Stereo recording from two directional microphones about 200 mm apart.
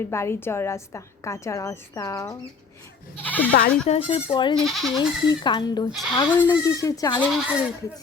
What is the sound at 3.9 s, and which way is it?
Speech, 30° left (ahead or behind).